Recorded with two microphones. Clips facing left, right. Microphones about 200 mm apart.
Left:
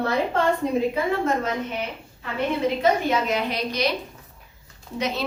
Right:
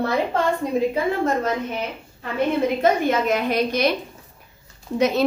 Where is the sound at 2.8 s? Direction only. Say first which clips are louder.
Right 2 dB; 50° right (ahead or behind).